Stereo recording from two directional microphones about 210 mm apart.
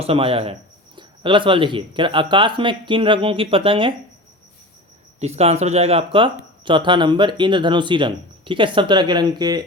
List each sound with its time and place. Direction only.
0.0 s speech: 25° right (ahead or behind)
5.2 s speech: 30° right (ahead or behind)